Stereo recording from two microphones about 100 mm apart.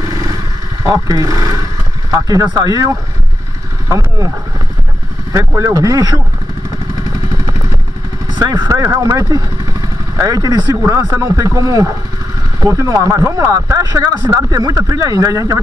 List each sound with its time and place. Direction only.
0.0 s wild animals: 40° right (ahead or behind)
0.8 s speech: 40° right (ahead or behind)
5.5 s speech: 35° right (ahead or behind)
8.4 s speech: 45° right (ahead or behind)